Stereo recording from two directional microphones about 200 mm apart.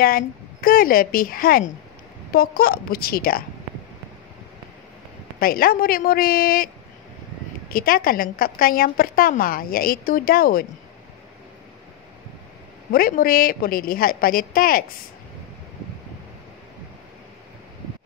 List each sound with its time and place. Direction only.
0.0 s a woman's voice: 45° left (ahead or behind)
5.4 s a woman's voice: 45° left (ahead or behind)
7.7 s a woman's voice: 45° left (ahead or behind)
12.9 s a woman's voice: 45° left (ahead or behind)